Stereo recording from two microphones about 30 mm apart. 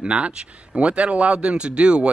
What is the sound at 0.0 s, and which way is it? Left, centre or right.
Speech, right.